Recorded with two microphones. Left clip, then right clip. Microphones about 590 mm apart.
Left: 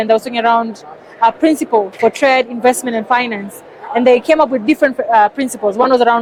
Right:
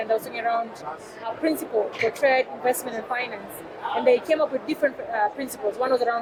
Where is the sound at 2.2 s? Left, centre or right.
Left.